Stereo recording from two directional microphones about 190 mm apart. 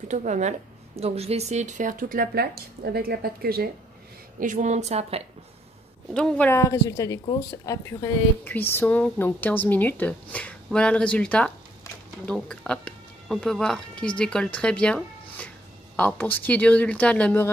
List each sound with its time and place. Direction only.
0.1 s speech: 40° right (ahead or behind)
4.4 s a woman's voice: 40° right (ahead or behind)
6.1 s speech: 5° left (ahead or behind)